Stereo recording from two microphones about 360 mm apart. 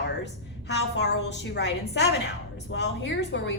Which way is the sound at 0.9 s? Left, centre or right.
Left.